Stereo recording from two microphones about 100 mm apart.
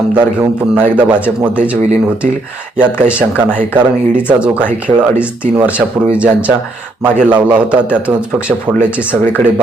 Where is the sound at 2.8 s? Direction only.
20° left (ahead or behind).